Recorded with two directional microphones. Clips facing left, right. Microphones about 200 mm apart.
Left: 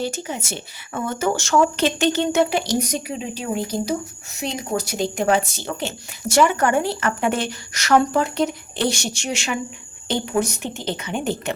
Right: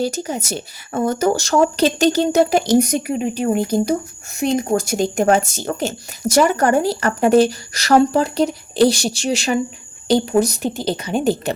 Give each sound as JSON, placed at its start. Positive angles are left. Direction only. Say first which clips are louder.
{"t": 0.0, "sound": "a woman's voice", "louder": "right 5 dB", "side_deg": -40}